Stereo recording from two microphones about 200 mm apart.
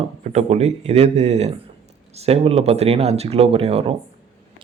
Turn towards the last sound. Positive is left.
turn(degrees=-30)  # may be behind; listen again after turning